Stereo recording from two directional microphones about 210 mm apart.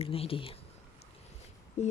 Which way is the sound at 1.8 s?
30° left (ahead or behind).